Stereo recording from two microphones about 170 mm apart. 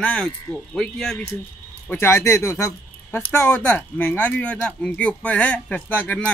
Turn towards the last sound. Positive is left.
turn(degrees=10)  # may be behind; listen again after turning